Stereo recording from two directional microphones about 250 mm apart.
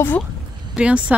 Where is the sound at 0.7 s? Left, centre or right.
Centre.